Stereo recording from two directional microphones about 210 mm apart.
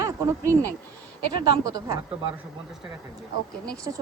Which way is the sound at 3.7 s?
15° right (ahead or behind).